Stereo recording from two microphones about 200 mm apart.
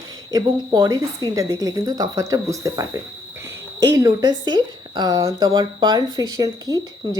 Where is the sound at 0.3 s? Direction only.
20° right (ahead or behind).